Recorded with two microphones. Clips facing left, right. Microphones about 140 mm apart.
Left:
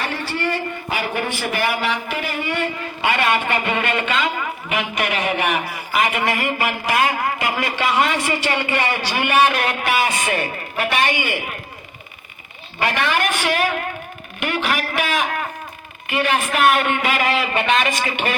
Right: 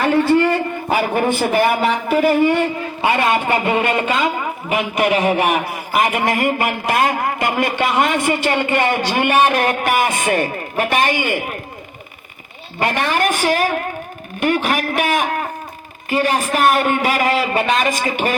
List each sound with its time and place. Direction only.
0.0 s a man's voice: 40° right (ahead or behind)
12.8 s a man's voice: 45° right (ahead or behind)